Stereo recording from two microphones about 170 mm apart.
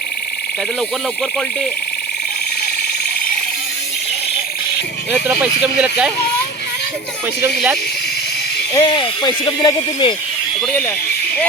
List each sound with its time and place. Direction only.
5.1 s speech: 5° right (ahead or behind)
8.7 s speech: 25° left (ahead or behind)
10.6 s speech: 10° left (ahead or behind)